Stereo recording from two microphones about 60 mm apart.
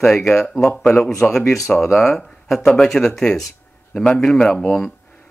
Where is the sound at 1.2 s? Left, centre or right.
Left.